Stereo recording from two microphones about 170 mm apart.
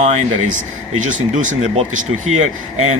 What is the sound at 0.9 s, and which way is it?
Speech, 45° right (ahead or behind).